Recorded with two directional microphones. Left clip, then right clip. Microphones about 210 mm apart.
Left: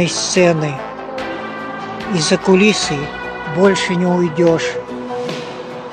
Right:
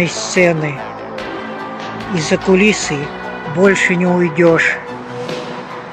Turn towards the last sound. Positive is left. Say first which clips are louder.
# right 3 dB
turn(degrees=0)  # may be behind; listen again after turning